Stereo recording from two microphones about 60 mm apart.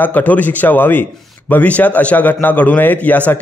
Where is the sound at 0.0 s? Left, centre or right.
Left.